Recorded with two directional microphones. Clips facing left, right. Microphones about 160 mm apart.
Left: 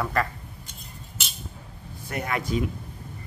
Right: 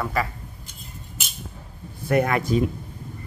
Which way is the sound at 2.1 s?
55° right (ahead or behind).